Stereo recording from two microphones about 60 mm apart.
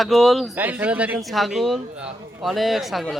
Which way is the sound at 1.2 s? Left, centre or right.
Centre.